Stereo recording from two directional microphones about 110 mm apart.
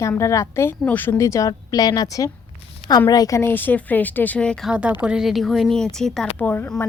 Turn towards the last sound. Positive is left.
turn(degrees=10)  # may be behind; listen again after turning